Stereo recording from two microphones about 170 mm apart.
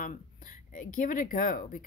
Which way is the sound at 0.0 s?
50° left (ahead or behind).